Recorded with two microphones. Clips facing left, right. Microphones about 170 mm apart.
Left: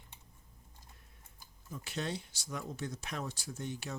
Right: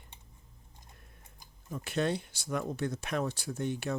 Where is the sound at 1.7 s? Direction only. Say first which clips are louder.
Right 7 dB; 60° right (ahead or behind).